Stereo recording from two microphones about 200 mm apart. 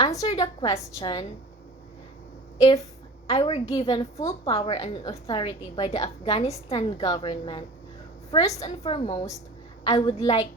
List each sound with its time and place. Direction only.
0.0 s a woman's voice: 20° left (ahead or behind)
3.2 s a woman's voice: 30° left (ahead or behind)